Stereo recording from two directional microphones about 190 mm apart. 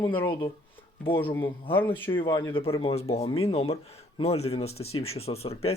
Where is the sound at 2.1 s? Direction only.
25° left (ahead or behind).